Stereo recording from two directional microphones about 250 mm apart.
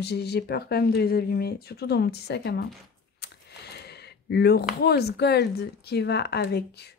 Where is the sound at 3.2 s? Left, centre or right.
Left.